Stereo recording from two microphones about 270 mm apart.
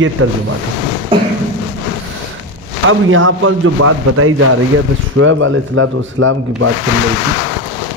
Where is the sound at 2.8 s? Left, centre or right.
Right.